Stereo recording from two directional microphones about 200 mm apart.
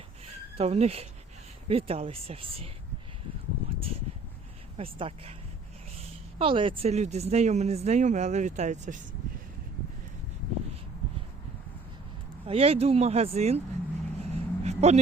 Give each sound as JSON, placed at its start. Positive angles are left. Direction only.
{"t": 0.5, "sound": "speech", "side_deg": -30}
{"t": 4.9, "sound": "speech", "side_deg": -25}
{"t": 6.4, "sound": "speech", "side_deg": -25}
{"t": 12.5, "sound": "speech", "side_deg": -30}
{"t": 14.2, "sound": "a sound", "side_deg": -30}